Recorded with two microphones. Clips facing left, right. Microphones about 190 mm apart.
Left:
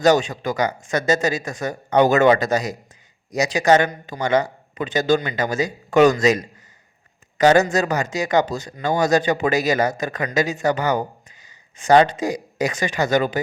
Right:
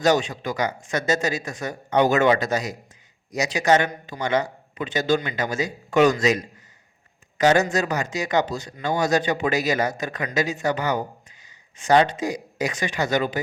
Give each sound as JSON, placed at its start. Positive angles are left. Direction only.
{"t": 0.0, "sound": "a man's voice", "side_deg": 45}